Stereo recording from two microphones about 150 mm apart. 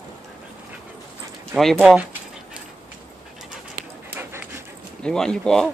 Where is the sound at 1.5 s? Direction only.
Centre (ahead or behind).